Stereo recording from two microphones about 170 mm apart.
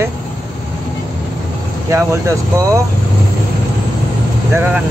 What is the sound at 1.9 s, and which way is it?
Speech, 15° right (ahead or behind).